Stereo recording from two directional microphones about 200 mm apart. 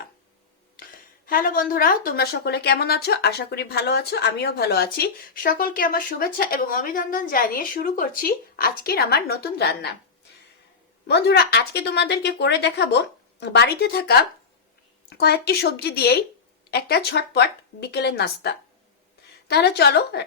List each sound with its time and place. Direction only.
1.3 s a woman's voice: 45° left (ahead or behind)
11.1 s a woman's voice: 55° left (ahead or behind)